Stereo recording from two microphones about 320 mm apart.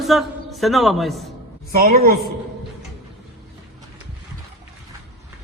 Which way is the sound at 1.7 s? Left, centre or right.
Right.